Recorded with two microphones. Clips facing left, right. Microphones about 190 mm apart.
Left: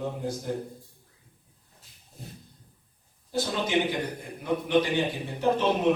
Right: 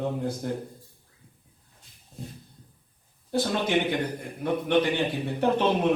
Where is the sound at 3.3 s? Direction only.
60° right (ahead or behind).